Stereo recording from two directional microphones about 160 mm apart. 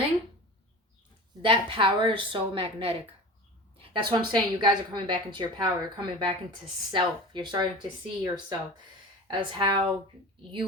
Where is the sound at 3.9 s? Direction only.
25° right (ahead or behind).